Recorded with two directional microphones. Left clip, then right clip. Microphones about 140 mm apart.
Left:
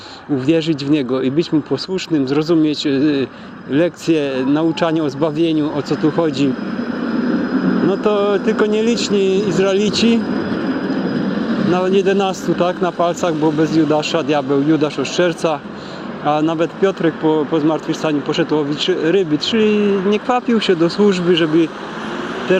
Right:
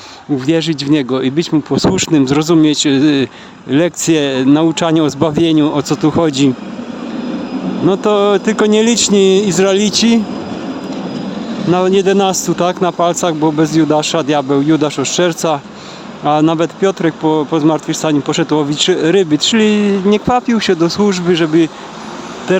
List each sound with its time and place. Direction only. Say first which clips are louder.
0.3 s speech: right 2 dB; 50° right (ahead or behind)
7.9 s speech: right 6 dB; 60° right (ahead or behind)
11.7 s speech: right 4 dB; 50° right (ahead or behind)